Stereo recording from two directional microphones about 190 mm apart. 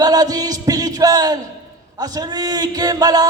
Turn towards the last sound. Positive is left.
turn(degrees=-20)  # may be behind; listen again after turning